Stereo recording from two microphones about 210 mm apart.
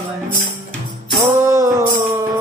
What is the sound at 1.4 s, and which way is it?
Music, 15° right (ahead or behind).